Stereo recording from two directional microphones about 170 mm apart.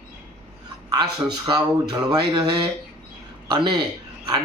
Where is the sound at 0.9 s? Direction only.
25° right (ahead or behind).